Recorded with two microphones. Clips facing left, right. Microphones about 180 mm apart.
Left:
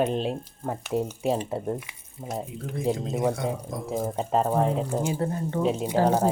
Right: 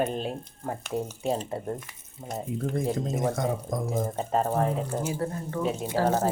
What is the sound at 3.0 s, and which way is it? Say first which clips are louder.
Speech: left 1 dB; 45° right (ahead or behind).